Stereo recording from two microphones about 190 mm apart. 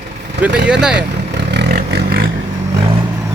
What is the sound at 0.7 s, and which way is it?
Speech, 5° right (ahead or behind).